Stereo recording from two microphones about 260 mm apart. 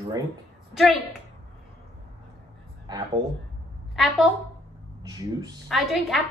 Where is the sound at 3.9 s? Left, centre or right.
Centre.